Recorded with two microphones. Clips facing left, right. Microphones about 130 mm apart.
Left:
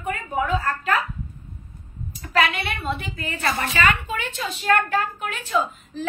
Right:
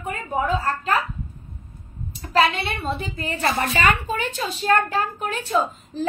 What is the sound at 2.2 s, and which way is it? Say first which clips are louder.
A woman's voice: right 2 dB; 30° right (ahead or behind).